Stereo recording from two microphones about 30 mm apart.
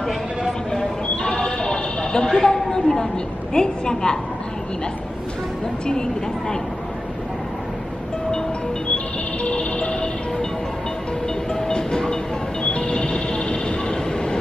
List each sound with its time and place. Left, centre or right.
0.5 s single-lens reflex camera: centre
1.1 s a sound: left
2.2 s a woman's voice: centre
8.9 s music: left
11.6 s train: left